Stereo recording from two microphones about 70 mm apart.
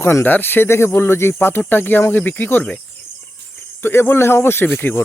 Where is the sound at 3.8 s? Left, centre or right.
Left.